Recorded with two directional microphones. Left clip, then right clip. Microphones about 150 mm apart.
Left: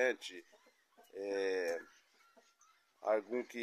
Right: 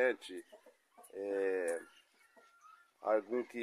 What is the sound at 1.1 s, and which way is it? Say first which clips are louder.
Speech: right 1 dB; 45° right (ahead or behind).